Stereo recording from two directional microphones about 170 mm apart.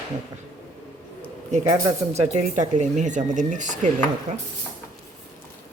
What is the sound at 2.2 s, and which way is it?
Speech, 45° right (ahead or behind).